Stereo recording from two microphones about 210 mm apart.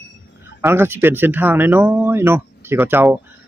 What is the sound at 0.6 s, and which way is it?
Speech, 10° right (ahead or behind).